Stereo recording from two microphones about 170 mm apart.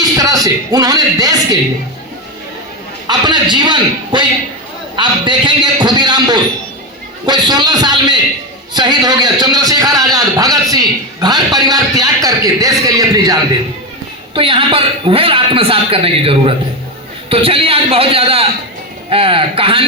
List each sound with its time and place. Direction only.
0.0 s speech: 20° right (ahead or behind)
3.1 s a man's voice: 25° right (ahead or behind)
14.3 s a man's voice: 30° right (ahead or behind)